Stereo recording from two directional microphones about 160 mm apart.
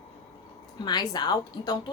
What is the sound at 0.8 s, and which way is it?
Speech, 25° left (ahead or behind).